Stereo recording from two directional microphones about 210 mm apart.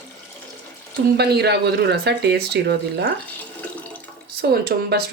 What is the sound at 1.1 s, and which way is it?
Speech, 50° right (ahead or behind).